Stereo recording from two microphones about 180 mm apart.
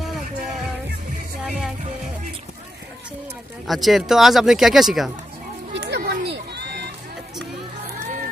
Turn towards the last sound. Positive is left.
turn(degrees=-70)  # may be behind; listen again after turning